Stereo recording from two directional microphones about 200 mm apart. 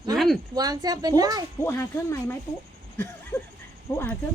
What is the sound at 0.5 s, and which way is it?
Speech, 20° right (ahead or behind).